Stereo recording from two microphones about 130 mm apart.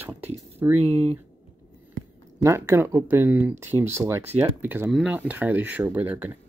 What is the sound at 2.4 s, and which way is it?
Speech, 20° right (ahead or behind).